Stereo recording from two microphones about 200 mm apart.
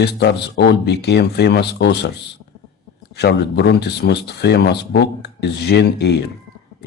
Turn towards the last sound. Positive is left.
turn(degrees=55)  # may be behind; listen again after turning